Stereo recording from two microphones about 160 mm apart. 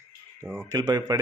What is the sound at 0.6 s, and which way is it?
Speech, 20° right (ahead or behind).